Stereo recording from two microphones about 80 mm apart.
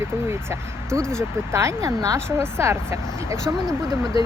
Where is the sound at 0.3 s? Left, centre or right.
Right.